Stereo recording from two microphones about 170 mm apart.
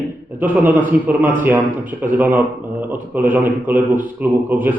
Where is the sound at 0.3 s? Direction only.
10° right (ahead or behind).